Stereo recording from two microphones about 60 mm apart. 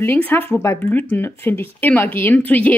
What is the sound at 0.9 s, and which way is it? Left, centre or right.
Speech, left.